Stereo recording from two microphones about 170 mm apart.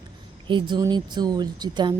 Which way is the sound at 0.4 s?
25° right (ahead or behind).